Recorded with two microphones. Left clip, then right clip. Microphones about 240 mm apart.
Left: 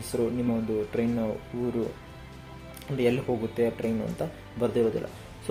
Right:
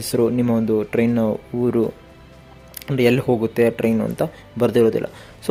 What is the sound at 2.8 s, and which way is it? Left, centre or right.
Speech, right.